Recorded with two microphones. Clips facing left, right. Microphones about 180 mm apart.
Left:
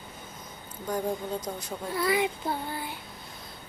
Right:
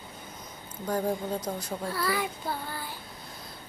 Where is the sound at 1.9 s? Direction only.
20° left (ahead or behind).